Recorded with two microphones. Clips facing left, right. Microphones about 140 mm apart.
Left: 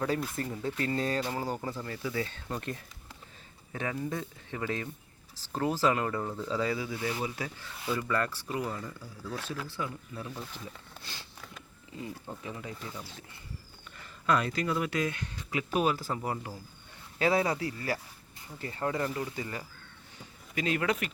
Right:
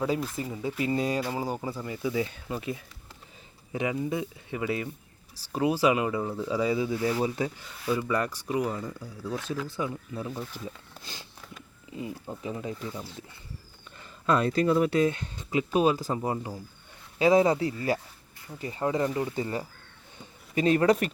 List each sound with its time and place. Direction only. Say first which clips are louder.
0.2 s speech: right 2 dB; 5° right (ahead or behind); by 7.5 s 30° right (ahead or behind)
7.6 s speech: right 4 dB; 10° right (ahead or behind)
11.0 s sniff: right 3 dB; 20° right (ahead or behind)
12.4 s speech: right 6 dB; 25° right (ahead or behind)